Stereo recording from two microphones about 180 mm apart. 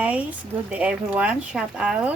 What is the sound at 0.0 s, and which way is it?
Speech, 5° right (ahead or behind).